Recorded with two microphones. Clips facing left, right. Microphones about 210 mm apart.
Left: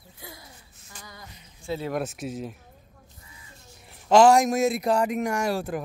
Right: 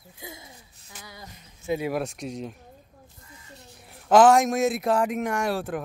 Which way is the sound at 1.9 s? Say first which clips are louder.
Even; 5° left (ahead or behind).